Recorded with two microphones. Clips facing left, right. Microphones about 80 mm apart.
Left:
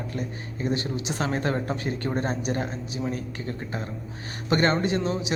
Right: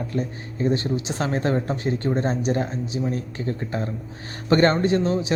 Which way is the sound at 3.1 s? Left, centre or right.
Right.